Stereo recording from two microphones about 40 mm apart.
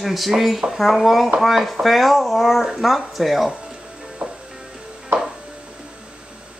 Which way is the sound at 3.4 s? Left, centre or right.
Centre.